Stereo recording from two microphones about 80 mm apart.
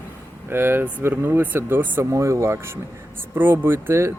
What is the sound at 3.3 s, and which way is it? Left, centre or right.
Speech, right.